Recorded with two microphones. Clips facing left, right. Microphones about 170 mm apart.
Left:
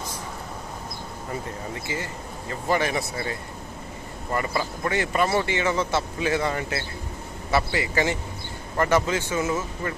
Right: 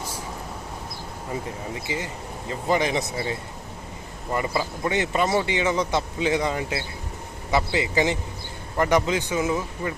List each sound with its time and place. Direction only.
1.7 s a man's voice: 15° right (ahead or behind)